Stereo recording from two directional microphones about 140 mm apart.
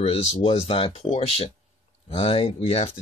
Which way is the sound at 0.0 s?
50° left (ahead or behind).